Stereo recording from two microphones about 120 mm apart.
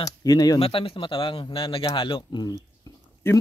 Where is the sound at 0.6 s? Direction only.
50° left (ahead or behind).